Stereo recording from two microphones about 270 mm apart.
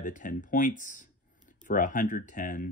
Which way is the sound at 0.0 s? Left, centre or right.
Left.